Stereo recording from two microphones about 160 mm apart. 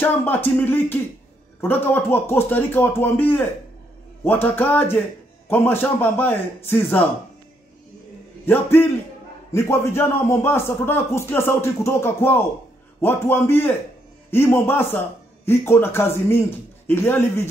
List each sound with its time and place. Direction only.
0.0 s a man's voice: 10° left (ahead or behind)
8.5 s a man's voice: 15° left (ahead or behind)